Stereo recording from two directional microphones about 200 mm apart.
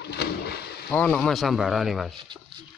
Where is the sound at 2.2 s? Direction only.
25° right (ahead or behind).